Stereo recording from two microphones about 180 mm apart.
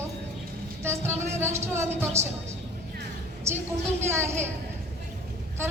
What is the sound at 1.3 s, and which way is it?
Speech, 15° right (ahead or behind).